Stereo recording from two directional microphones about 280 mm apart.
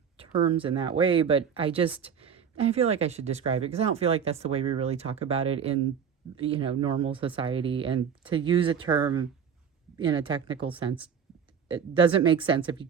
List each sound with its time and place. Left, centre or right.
0.2 s speech: centre